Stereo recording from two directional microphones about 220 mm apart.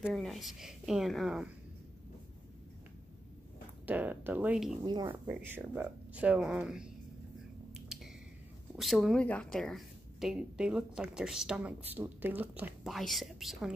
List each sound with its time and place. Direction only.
0.0 s a woman's voice: centre (ahead or behind)
3.8 s speech: 5° right (ahead or behind)
4.8 s a woman's voice: 20° right (ahead or behind)
5.3 s a woman's voice: 10° right (ahead or behind)
7.7 s finger snapping: centre (ahead or behind)
8.7 s a woman's voice: centre (ahead or behind)